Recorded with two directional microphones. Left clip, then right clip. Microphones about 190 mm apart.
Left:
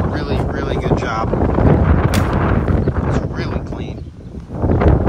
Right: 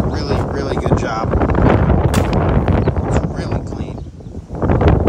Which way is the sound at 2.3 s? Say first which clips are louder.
Right 1 dB; 5° right (ahead or behind).